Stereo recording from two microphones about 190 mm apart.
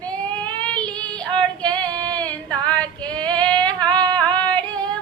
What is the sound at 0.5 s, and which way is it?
Child singing, 5° left (ahead or behind).